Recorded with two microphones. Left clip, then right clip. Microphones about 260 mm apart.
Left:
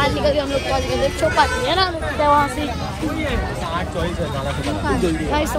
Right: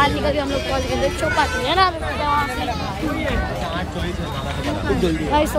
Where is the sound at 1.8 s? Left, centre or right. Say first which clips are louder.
Left 3 dB; centre.